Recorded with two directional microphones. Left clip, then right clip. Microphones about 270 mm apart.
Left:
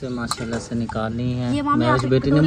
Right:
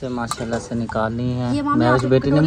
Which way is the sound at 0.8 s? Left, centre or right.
Right.